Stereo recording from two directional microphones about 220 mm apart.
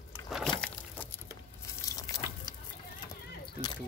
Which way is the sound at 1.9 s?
15° left (ahead or behind).